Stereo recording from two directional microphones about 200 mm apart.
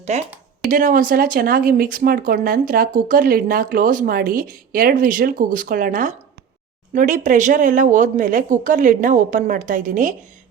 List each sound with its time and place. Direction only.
0.0 s speech: 35° right (ahead or behind)